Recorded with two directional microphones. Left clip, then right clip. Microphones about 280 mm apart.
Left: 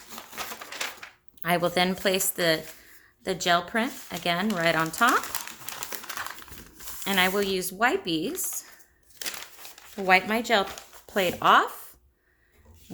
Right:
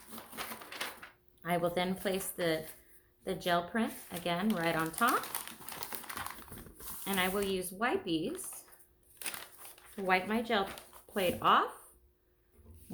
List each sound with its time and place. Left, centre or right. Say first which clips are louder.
0.2 s a sound: left 7 dB; centre
1.4 s speech: left 8 dB; left
7.0 s speech: left 9 dB; left
9.9 s speech: left 9 dB; left